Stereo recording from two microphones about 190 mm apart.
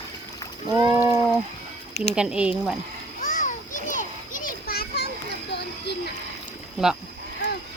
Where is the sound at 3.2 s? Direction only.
45° left (ahead or behind).